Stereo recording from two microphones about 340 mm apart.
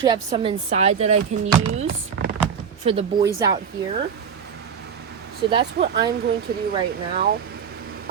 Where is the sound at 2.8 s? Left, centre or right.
Centre.